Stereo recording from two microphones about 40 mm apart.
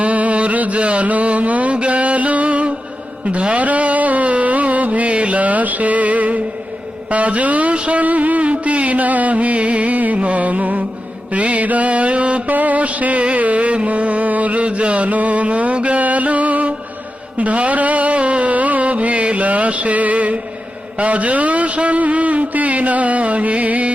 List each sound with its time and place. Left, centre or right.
0.0 s mantra: right
3.2 s music: right
7.1 s a sound: right
11.3 s mantra: right
12.5 s music: right
21.0 s a sound: right